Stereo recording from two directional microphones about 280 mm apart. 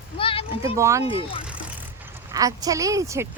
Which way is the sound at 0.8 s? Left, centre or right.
Centre.